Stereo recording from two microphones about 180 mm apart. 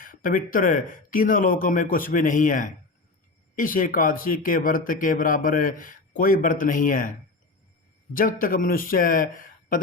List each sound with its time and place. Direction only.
0.0 s speech: 50° left (ahead or behind)
8.1 s speech: 50° left (ahead or behind)